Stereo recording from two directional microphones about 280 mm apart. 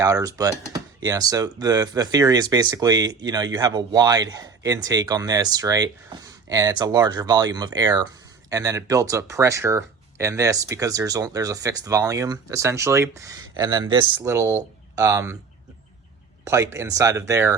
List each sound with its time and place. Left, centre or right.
0.0 s speech: centre
16.4 s speech: centre